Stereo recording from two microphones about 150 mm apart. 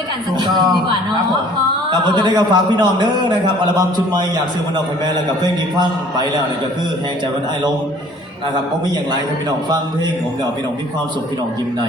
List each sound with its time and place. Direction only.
0.3 s a man's voice: 30° right (ahead or behind)